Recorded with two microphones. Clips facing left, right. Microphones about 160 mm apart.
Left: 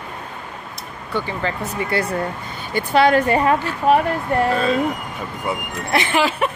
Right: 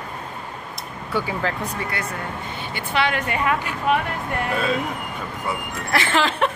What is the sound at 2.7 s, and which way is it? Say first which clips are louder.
A woman's voice: left 8 dB; 40° left (ahead or behind).